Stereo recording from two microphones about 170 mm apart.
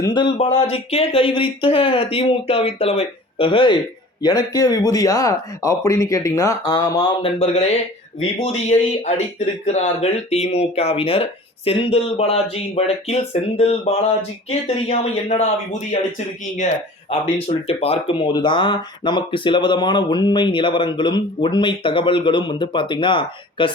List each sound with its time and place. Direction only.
0.0 s speech: 25° left (ahead or behind)
0.3 s speech: 40° left (ahead or behind)